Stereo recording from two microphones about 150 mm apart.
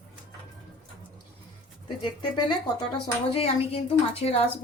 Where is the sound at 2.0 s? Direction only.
30° left (ahead or behind).